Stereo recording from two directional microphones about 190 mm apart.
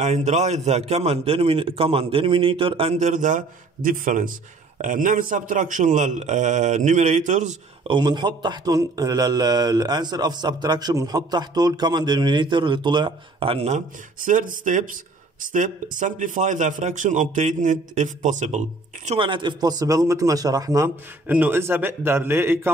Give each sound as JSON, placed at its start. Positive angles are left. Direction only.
{"t": 0.0, "sound": "a man's voice", "side_deg": -35}
{"t": 7.9, "sound": "a man's voice", "side_deg": -25}
{"t": 19.0, "sound": "a man's voice", "side_deg": -25}